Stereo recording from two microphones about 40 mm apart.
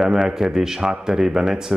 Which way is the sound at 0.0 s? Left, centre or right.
Centre.